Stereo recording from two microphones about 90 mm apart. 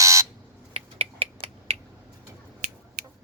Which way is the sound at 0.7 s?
90° right.